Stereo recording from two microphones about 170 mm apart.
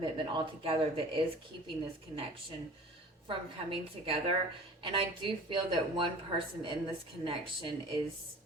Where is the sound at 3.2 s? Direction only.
30° right (ahead or behind).